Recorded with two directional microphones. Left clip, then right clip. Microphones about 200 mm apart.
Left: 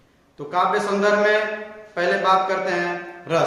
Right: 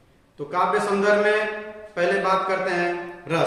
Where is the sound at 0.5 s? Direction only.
10° left (ahead or behind).